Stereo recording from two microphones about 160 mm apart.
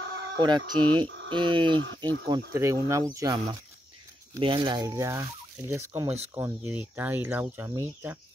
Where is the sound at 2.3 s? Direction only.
20° right (ahead or behind).